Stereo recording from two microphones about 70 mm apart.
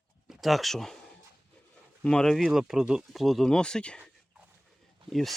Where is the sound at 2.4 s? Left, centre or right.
Centre.